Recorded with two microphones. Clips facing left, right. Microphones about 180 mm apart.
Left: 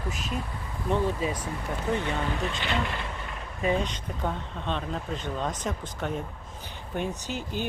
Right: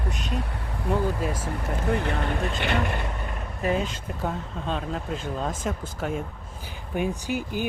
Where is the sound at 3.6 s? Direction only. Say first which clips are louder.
Right 1 dB; 5° right (ahead or behind).